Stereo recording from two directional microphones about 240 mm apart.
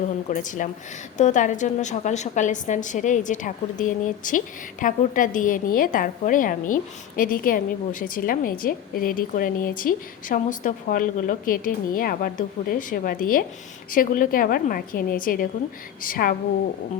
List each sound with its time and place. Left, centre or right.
0.3 s a woman's voice: left